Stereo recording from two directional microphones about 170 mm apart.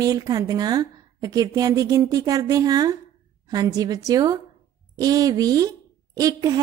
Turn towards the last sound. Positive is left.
turn(degrees=-20)  # may be behind; listen again after turning